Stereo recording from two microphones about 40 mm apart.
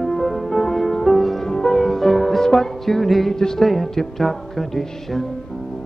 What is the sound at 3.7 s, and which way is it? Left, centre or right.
Music, centre.